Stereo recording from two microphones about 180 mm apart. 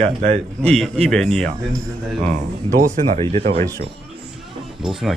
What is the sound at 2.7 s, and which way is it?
Speech, 45° right (ahead or behind).